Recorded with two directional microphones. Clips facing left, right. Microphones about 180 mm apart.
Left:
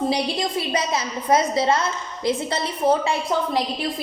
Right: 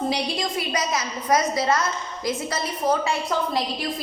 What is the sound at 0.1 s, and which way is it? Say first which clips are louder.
A woman's voice: left 3 dB; 30° left (ahead or behind).